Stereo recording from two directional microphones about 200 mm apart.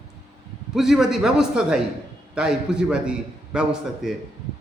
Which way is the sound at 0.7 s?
Centre (ahead or behind).